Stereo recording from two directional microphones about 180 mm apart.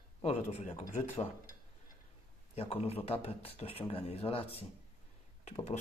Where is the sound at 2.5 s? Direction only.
35° left (ahead or behind).